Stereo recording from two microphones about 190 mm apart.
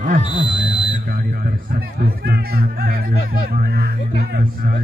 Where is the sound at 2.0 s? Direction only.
55° right (ahead or behind).